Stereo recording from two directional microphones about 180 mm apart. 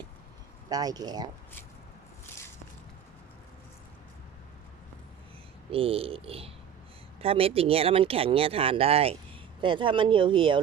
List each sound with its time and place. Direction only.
0.7 s speech: 20° right (ahead or behind)
5.7 s speech: 30° right (ahead or behind)